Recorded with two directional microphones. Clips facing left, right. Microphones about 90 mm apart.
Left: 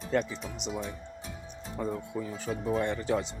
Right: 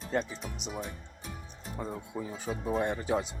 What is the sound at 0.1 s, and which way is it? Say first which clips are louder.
Speech: left 3 dB; 30° right (ahead or behind).